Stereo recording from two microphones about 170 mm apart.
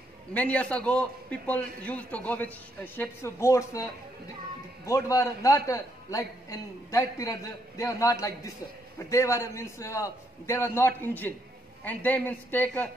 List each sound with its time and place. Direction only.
0.3 s a man's voice: 10° left (ahead or behind)